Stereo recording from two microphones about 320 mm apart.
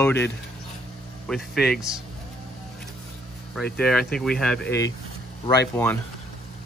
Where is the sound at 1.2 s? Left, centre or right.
Centre.